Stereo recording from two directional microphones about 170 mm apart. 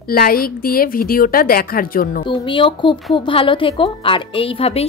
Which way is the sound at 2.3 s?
30° left (ahead or behind).